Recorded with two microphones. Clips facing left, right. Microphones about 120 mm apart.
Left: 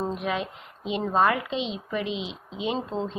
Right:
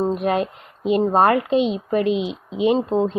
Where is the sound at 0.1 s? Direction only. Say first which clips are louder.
Right 8 dB; 50° right (ahead or behind).